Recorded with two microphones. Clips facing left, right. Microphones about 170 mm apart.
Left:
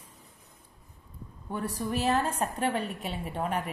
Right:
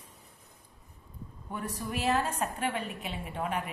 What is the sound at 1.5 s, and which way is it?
A woman's voice, 35° left (ahead or behind).